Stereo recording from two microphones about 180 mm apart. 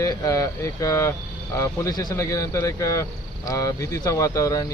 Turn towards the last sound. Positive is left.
turn(degrees=15)  # may be behind; listen again after turning